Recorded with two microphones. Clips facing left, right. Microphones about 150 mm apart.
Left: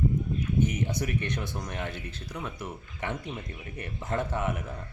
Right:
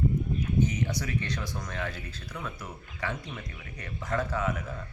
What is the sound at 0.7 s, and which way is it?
Speech, 25° left (ahead or behind).